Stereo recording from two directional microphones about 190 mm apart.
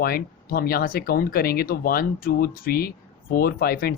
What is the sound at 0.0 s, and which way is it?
Speech, 50° left (ahead or behind).